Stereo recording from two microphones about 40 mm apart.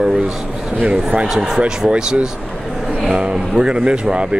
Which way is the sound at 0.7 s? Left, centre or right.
Right.